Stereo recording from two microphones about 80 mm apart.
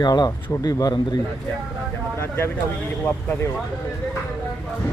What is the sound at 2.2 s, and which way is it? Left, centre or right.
Speech, left.